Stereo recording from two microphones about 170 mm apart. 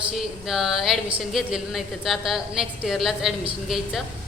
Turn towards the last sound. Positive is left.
turn(degrees=0)  # may be behind; listen again after turning